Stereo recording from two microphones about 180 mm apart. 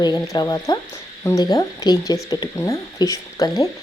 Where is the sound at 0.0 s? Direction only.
20° left (ahead or behind).